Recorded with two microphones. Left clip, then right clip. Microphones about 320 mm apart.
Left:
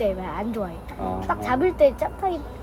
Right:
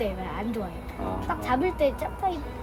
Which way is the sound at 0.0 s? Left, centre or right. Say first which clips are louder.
Left 5 dB; centre.